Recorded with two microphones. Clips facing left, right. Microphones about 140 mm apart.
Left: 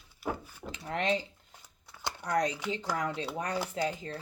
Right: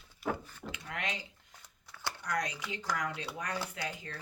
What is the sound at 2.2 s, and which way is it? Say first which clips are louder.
A woman's voice: left 7 dB; 30° left (ahead or behind).